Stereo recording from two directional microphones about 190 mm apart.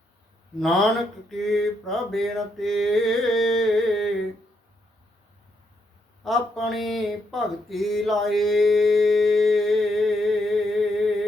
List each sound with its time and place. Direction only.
0.6 s mantra: centre (ahead or behind)
6.2 s speech: centre (ahead or behind)